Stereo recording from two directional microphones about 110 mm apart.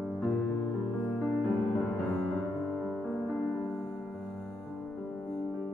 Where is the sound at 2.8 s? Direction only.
5° left (ahead or behind).